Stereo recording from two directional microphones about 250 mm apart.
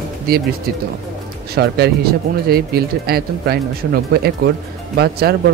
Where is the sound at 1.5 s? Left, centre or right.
Right.